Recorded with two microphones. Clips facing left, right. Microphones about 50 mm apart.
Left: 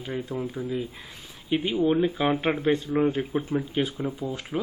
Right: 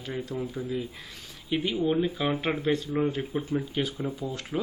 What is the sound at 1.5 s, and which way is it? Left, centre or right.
Speech, centre.